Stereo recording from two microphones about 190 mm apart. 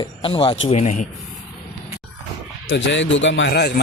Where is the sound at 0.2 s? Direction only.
25° left (ahead or behind).